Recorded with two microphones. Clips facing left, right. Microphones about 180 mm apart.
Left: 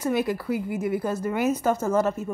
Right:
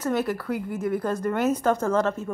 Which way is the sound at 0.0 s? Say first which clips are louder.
Left 1 dB; 10° left (ahead or behind).